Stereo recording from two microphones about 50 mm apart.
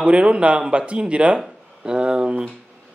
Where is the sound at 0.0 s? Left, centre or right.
Right.